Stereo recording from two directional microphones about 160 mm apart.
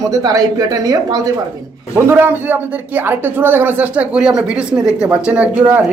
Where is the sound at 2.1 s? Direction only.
15° right (ahead or behind).